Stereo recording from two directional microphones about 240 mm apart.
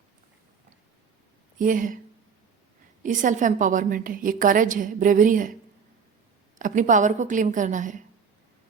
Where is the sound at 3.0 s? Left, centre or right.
Right.